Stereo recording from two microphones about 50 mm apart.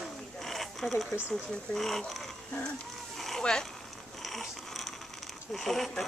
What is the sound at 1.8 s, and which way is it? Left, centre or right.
Speech, centre.